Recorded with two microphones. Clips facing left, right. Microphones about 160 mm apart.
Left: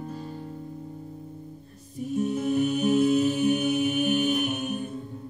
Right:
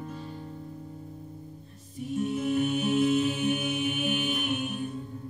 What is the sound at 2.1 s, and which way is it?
Music, 40° left (ahead or behind).